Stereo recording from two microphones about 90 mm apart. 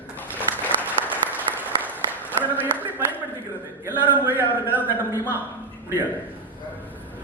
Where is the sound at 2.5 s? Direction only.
20° right (ahead or behind).